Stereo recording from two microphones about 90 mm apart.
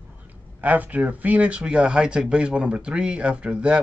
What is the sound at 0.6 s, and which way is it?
Speech, 20° right (ahead or behind).